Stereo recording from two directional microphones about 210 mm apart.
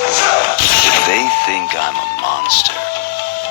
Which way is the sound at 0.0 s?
45° left (ahead or behind).